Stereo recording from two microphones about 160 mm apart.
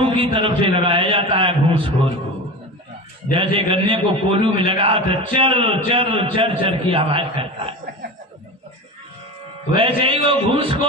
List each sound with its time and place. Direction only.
0.0 s a man's voice: 35° right (ahead or behind)
3.3 s a man's voice: 35° right (ahead or behind)
9.8 s a man's voice: 35° right (ahead or behind)